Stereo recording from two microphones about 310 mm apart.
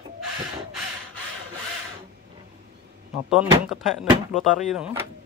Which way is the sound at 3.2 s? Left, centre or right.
Centre.